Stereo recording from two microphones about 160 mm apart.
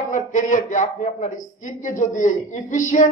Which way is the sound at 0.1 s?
55° left (ahead or behind).